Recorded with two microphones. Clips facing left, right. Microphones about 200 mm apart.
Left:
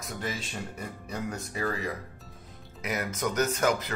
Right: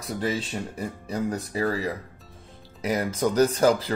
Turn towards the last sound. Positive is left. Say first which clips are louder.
# right 6 dB
turn(degrees=-30)  # may be behind; listen again after turning